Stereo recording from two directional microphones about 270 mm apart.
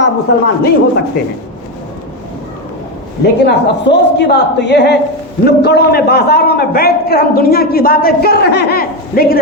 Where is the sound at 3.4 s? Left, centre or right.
Left.